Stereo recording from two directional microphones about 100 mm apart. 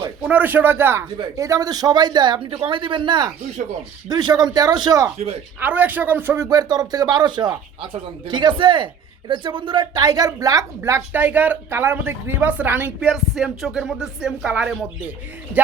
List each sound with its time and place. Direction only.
0.2 s a man's voice: 15° right (ahead or behind)
1.4 s a man's voice: 35° right (ahead or behind)
5.5 s a woman's voice: 15° right (ahead or behind)
6.4 s a man's voice: 40° right (ahead or behind)
10.8 s a man's voice: 25° right (ahead or behind)
13.1 s speech: 5° right (ahead or behind)